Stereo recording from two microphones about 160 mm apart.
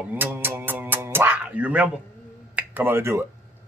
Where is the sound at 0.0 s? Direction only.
10° right (ahead or behind).